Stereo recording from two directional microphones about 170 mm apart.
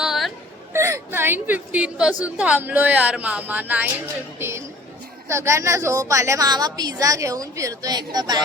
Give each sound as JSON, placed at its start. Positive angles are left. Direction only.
{"t": 0.0, "sound": "chatter", "side_deg": 0}
{"t": 0.7, "sound": "a woman's voice", "side_deg": -15}